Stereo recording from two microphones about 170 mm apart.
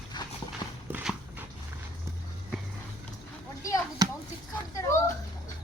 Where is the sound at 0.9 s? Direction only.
10° right (ahead or behind).